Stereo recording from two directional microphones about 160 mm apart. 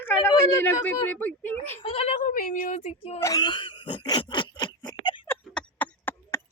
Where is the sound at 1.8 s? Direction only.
35° left (ahead or behind).